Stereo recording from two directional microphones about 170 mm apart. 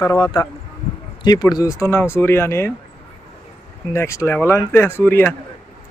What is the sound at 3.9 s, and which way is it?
Speech, 15° left (ahead or behind).